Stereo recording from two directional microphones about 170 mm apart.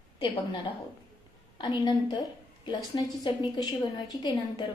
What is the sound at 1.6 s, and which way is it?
A woman's voice, 25° left (ahead or behind).